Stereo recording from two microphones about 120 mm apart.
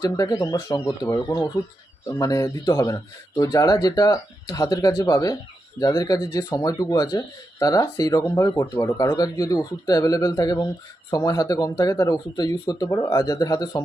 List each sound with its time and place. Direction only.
0.0 s speech: 30° left (ahead or behind)